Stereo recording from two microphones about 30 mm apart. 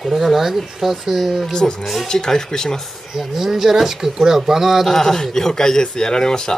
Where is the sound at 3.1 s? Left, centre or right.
Centre.